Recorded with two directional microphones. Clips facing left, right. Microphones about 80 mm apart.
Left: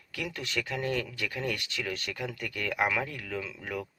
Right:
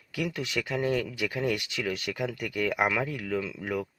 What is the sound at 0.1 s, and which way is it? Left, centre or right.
Speech, centre.